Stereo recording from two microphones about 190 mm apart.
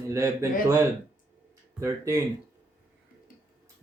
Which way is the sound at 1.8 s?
15° right (ahead or behind).